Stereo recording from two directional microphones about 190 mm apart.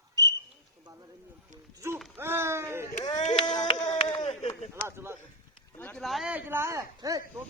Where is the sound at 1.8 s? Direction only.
15° right (ahead or behind).